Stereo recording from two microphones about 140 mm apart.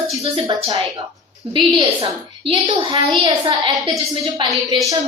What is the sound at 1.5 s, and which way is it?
A woman's voice, 35° right (ahead or behind).